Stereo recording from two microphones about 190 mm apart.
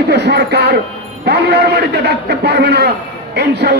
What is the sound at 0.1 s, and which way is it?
A man's voice, 60° right (ahead or behind).